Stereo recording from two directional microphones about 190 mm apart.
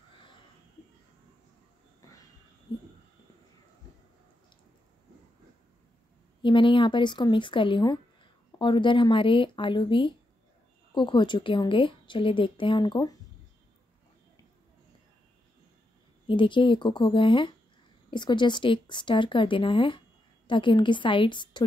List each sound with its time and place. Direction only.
6.4 s a woman's voice: 25° left (ahead or behind)
16.3 s a woman's voice: 25° left (ahead or behind)